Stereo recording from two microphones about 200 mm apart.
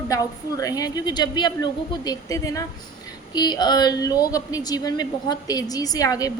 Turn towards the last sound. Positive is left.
turn(degrees=15)  # may be behind; listen again after turning